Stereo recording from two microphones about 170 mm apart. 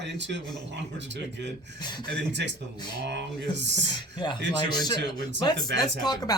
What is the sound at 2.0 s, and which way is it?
Speech, 90° right.